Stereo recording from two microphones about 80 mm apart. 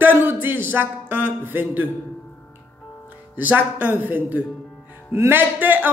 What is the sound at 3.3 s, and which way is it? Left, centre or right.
A woman's voice, right.